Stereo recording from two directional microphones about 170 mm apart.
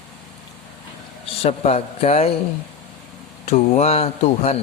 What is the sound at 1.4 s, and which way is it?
Speech, 40° left (ahead or behind).